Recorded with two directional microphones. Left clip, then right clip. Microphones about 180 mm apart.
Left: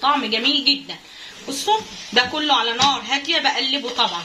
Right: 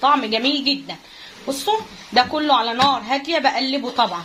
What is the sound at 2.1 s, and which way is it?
Speech, 60° right (ahead or behind).